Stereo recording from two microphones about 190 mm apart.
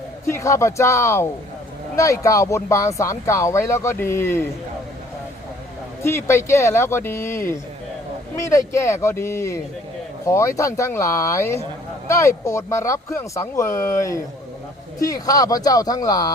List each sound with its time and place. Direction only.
0.3 s speech: 15° left (ahead or behind)
6.0 s speech: 15° left (ahead or behind)